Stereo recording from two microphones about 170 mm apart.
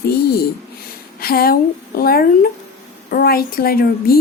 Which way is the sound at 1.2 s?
60° left (ahead or behind).